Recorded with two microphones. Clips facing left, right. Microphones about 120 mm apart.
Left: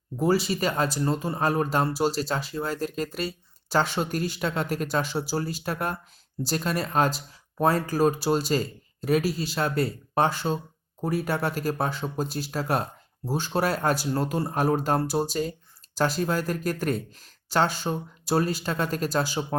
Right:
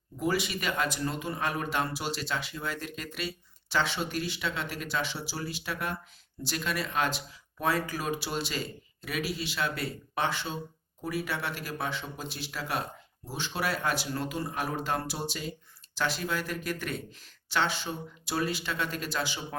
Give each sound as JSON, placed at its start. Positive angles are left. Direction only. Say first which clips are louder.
{"t": 0.2, "sound": "speech", "louder": "left 7 dB", "side_deg": 35}